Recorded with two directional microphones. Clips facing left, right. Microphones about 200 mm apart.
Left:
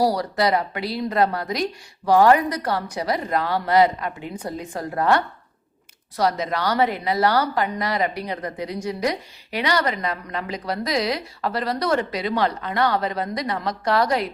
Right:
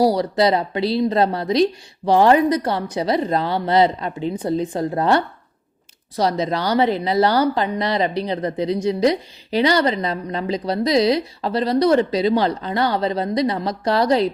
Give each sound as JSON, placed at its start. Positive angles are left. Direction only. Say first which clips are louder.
{"t": 0.0, "sound": "speech", "louder": "right 4 dB", "side_deg": -25}